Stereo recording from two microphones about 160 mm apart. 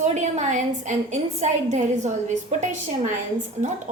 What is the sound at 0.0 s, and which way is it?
A woman's voice, 45° right (ahead or behind).